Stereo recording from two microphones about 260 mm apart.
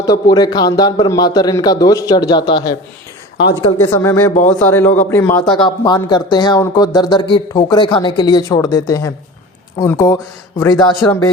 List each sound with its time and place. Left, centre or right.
0.0 s speech: centre
3.8 s speech: centre